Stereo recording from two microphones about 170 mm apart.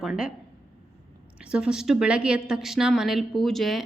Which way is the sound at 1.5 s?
5° right (ahead or behind).